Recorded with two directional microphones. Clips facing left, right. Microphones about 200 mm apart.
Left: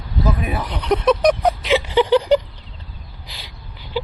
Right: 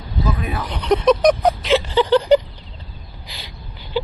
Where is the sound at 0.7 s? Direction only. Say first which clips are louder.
Right 2 dB; 5° left (ahead or behind).